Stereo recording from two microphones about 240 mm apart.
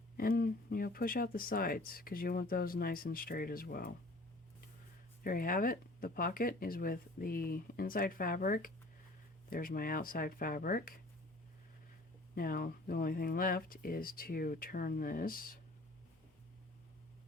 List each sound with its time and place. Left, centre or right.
0.2 s speech: left
5.2 s speech: left
12.3 s speech: left